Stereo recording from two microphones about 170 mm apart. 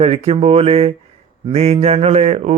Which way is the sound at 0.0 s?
40° right (ahead or behind).